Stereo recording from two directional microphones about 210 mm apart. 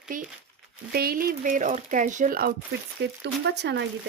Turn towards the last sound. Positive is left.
turn(degrees=-55)  # may be behind; listen again after turning